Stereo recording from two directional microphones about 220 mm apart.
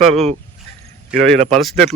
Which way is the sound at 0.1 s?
30° right (ahead or behind).